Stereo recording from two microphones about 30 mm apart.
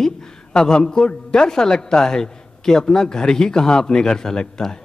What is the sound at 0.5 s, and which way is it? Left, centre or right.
A man's voice, left.